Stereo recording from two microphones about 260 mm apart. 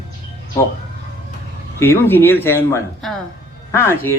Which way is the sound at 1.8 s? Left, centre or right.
Centre.